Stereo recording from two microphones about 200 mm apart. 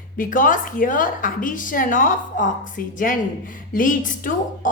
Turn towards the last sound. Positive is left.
turn(degrees=40)  # may be behind; listen again after turning